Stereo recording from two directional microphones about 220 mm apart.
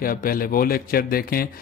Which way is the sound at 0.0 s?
40° left (ahead or behind).